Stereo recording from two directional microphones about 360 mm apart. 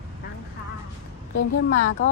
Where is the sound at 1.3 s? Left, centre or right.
Left.